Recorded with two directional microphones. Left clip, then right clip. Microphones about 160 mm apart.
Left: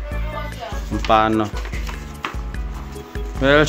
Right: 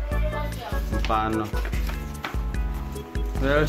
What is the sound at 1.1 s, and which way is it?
Speech, 45° left (ahead or behind).